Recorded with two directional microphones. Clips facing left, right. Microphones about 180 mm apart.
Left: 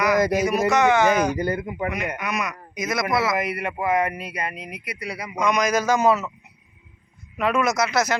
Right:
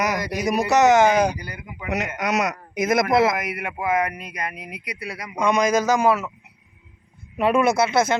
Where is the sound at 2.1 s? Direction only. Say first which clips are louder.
Right 5 dB; 80° right; by 3.3 s 50° right (ahead or behind).